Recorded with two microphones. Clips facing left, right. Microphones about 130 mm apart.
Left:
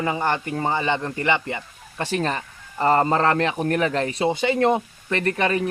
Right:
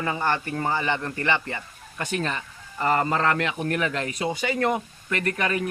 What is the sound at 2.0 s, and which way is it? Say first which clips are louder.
Speech: left 4 dB; 35° left (ahead or behind).